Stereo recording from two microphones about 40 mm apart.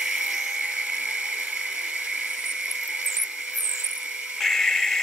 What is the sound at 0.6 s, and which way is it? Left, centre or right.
Dental drill, right.